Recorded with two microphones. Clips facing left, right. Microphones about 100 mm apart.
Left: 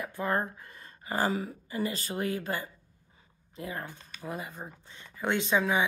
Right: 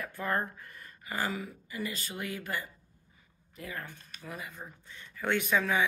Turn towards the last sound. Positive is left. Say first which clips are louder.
# left 2 dB
turn(degrees=20)  # may be behind; listen again after turning